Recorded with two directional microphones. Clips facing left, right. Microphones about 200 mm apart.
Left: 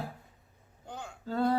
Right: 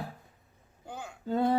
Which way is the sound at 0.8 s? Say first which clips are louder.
Right 1 dB; 5° right (ahead or behind).